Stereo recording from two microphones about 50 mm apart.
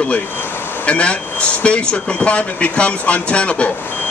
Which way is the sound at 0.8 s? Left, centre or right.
Left.